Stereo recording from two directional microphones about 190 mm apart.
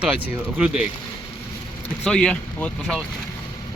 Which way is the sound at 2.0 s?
5° left (ahead or behind).